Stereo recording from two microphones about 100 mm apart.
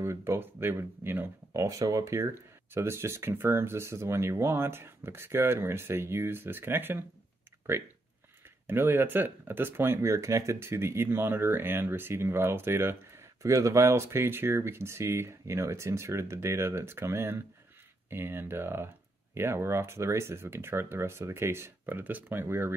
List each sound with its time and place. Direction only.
0.0 s speech: 25° right (ahead or behind)
8.6 s speech: 25° right (ahead or behind)